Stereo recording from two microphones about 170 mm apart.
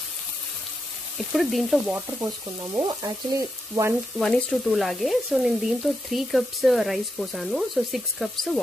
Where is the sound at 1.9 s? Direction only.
20° right (ahead or behind).